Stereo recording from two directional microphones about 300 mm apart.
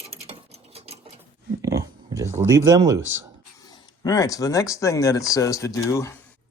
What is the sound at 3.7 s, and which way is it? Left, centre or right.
Speech, centre.